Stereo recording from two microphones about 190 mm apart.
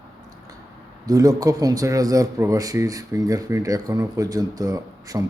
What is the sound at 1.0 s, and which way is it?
A man's voice, 20° right (ahead or behind).